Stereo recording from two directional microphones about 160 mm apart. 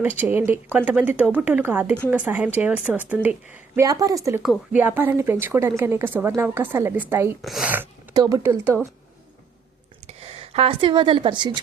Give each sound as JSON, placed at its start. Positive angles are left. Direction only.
{"t": 0.0, "sound": "a woman's voice", "side_deg": -10}
{"t": 3.8, "sound": "a woman's voice", "side_deg": -20}
{"t": 8.1, "sound": "a woman's voice", "side_deg": -20}
{"t": 10.1, "sound": "speech", "side_deg": -40}